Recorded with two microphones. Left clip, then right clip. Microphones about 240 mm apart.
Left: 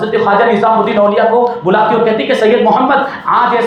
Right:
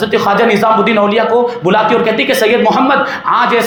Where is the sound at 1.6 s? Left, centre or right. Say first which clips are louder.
Even; right.